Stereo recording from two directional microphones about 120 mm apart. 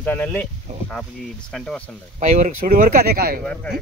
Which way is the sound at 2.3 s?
90° right.